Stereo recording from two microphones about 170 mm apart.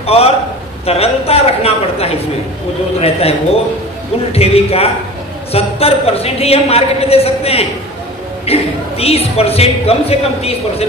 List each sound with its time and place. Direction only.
0.0 s a man's voice: 35° left (ahead or behind)